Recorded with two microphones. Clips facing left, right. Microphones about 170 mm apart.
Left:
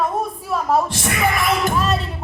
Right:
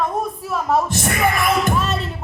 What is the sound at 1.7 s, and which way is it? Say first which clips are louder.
Music: left 1 dB; centre (ahead or behind).